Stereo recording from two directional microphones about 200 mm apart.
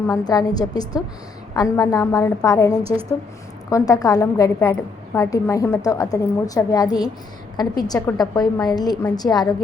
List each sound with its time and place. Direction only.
0.1 s a woman's voice: 20° left (ahead or behind)